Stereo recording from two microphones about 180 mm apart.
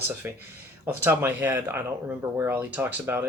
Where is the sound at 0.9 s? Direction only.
15° right (ahead or behind).